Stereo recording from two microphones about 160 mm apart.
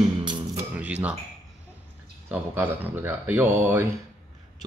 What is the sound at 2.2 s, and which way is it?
Speech, 15° right (ahead or behind).